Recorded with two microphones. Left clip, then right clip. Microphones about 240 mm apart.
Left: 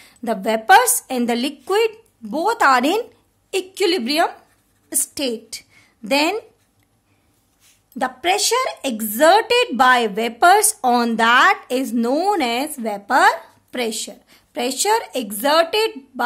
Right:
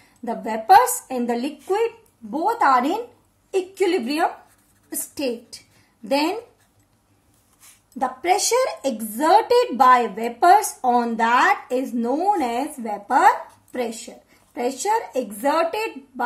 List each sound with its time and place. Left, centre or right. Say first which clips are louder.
0.2 s a woman's voice: left 6 dB; left
8.0 s a woman's voice: left 1 dB; left